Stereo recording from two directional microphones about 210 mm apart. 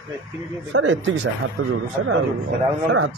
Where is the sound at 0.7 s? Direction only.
65° right (ahead or behind).